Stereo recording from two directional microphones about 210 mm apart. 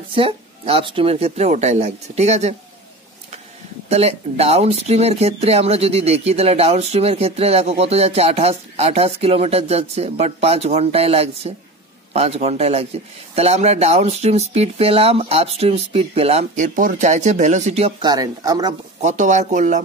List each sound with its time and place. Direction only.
0.1 s speech: 25° right (ahead or behind)
3.9 s speech: 30° right (ahead or behind)
18.1 s speech: 15° right (ahead or behind)
18.9 s speech: 35° right (ahead or behind)